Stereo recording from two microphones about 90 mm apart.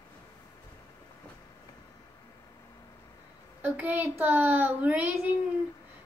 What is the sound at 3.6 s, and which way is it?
A child's voice, 15° right (ahead or behind).